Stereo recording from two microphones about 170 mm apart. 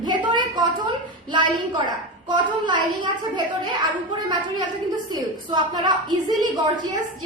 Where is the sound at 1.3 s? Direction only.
25° right (ahead or behind).